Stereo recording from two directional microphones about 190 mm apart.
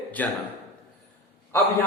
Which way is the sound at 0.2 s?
10° left (ahead or behind).